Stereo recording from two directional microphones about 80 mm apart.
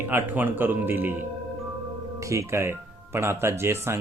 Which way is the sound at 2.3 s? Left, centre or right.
Right.